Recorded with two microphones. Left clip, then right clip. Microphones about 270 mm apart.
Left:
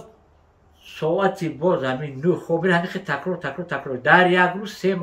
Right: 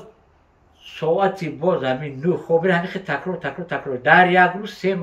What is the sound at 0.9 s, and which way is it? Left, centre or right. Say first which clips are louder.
Speech: right 2 dB; centre.